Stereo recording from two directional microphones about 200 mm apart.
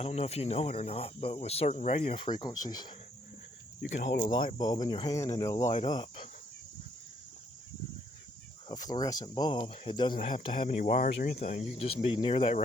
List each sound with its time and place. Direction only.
0.0 s speech: 30° left (ahead or behind)
3.8 s speech: 55° left (ahead or behind)
4.0 s speech: 35° left (ahead or behind)
4.3 s speech: 20° left (ahead or behind)
8.7 s speech: 20° left (ahead or behind)
10.6 s speech: 40° left (ahead or behind)